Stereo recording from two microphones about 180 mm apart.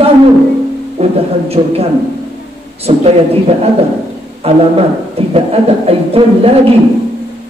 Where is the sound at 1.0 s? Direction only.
35° right (ahead or behind).